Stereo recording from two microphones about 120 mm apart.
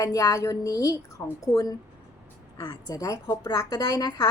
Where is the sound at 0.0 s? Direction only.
30° left (ahead or behind).